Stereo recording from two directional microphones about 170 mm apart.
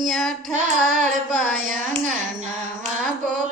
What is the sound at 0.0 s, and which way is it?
Female singing, centre (ahead or behind).